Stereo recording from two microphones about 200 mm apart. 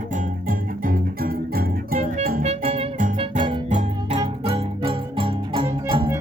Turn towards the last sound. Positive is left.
turn(degrees=-25)  # may be behind; listen again after turning